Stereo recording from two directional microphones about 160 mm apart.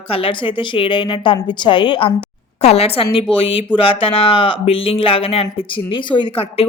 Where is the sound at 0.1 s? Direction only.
35° left (ahead or behind).